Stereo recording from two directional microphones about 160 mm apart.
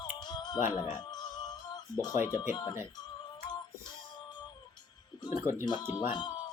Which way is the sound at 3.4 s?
25° left (ahead or behind).